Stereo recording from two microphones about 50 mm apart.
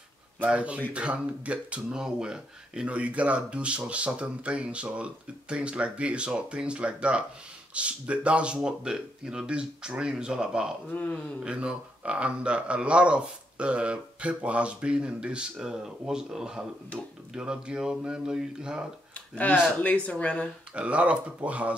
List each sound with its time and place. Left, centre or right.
0.5 s speech: right
1.9 s speech: centre
19.1 s speech: left
20.7 s speech: right